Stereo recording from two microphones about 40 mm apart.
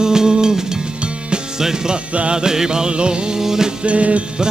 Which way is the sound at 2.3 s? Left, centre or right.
Centre.